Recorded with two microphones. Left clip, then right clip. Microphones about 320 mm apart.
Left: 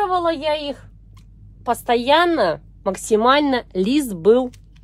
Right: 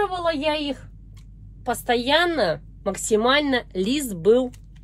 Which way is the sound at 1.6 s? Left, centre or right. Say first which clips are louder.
Left 4 dB; left.